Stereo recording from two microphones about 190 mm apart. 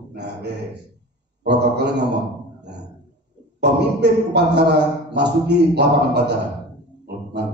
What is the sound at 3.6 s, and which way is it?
Speech, 60° right (ahead or behind).